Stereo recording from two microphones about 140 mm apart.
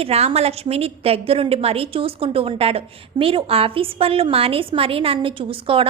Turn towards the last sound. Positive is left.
turn(degrees=-40)  # may be behind; listen again after turning